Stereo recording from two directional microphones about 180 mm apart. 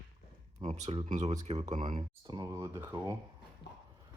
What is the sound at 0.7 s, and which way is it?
Speech, 35° right (ahead or behind).